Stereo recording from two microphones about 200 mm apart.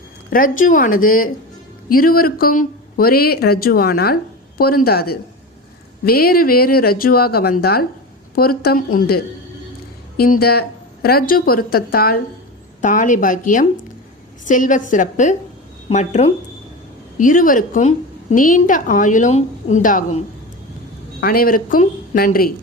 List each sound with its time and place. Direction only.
0.3 s a woman's voice: 45° left (ahead or behind)